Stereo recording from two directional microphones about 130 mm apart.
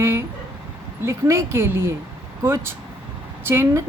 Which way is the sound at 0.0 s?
20° right (ahead or behind).